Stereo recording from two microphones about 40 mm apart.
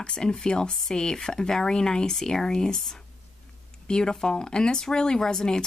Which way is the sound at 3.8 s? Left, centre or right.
Centre.